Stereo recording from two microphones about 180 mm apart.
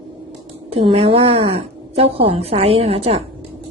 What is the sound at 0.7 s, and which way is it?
Speech, 35° right (ahead or behind).